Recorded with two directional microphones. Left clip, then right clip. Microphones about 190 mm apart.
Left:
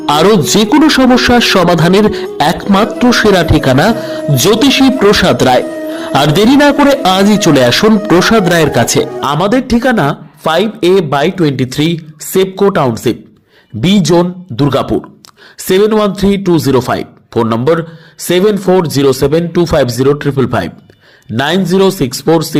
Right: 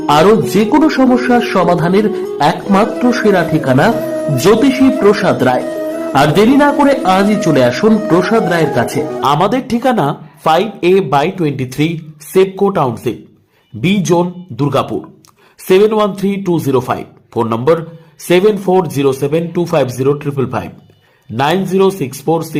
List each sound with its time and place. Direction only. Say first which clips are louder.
0.0 s a man's voice: even; 25° left (ahead or behind)
5.6 s music: right 1 dB; centre (ahead or behind)
6.0 s a man's voice: left 1 dB; 30° left (ahead or behind)
9.3 s a man's voice: left 3 dB; 15° left (ahead or behind)